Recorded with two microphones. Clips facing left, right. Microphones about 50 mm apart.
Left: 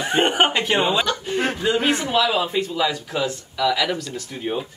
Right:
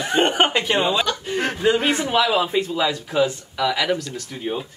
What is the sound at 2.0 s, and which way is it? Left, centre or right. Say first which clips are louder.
Speech: right 1 dB; right.